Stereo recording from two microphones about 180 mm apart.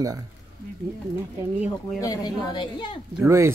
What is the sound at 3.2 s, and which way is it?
Speech, 15° right (ahead or behind).